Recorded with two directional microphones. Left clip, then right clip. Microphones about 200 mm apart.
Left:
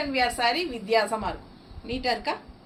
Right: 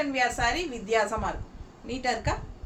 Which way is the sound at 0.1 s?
15° right (ahead or behind).